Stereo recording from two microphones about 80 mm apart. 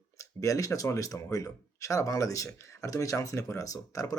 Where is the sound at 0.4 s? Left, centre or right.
Left.